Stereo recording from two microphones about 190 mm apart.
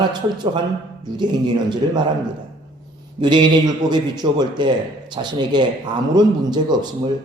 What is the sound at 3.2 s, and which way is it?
A man's voice, 25° right (ahead or behind).